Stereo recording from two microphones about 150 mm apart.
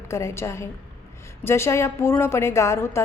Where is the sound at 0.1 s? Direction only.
20° left (ahead or behind).